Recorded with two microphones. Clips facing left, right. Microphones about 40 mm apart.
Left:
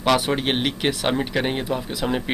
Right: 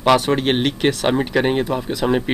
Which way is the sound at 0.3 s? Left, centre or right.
Centre.